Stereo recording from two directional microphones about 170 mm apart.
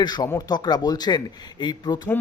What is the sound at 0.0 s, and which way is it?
A man's voice, 25° left (ahead or behind).